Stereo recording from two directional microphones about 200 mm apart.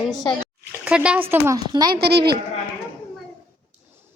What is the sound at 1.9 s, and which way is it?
Speech, 55° right (ahead or behind).